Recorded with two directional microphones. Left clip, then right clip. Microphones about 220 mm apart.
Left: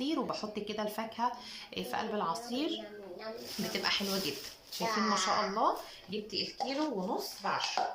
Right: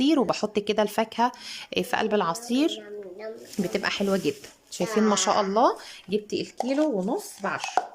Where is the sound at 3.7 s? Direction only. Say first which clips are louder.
Right 7 dB; 55° right (ahead or behind).